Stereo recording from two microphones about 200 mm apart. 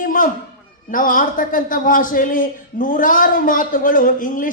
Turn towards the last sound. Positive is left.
turn(degrees=40)  # may be behind; listen again after turning